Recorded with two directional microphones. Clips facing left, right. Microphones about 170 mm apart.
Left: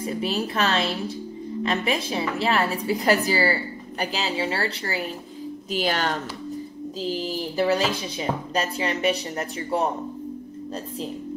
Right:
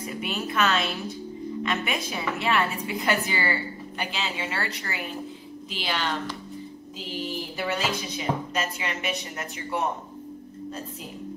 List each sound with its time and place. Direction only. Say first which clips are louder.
0.0 s a woman's voice: left 5 dB; 35° left (ahead or behind)
5.7 s speech: left 5 dB; 45° left (ahead or behind)
7.5 s a woman's voice: left 7 dB; 35° left (ahead or behind)